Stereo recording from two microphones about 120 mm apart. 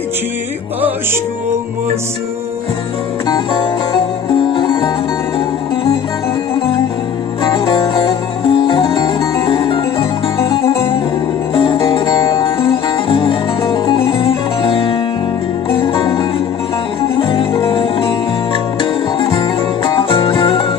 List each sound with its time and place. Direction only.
4.5 s music: 45° left (ahead or behind)
7.5 s music: 45° left (ahead or behind)